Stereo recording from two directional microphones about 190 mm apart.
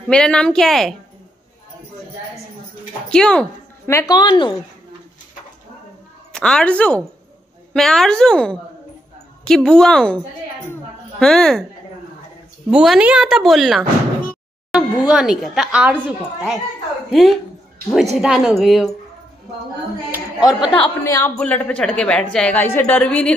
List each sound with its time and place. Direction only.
0.1 s a woman's voice: 5° left (ahead or behind)
3.1 s a woman's voice: 5° left (ahead or behind); by 4.6 s 25° left (ahead or behind)
6.3 s a woman's voice: 5° left (ahead or behind)
10.7 s a sound: 5° left (ahead or behind)
12.6 s a woman's voice: 5° right (ahead or behind)
20.1 s a woman's voice: 5° right (ahead or behind)
21.0 s a woman's voice: 15° left (ahead or behind)